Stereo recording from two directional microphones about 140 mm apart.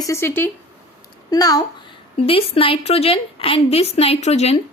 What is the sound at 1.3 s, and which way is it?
Speech, 25° left (ahead or behind).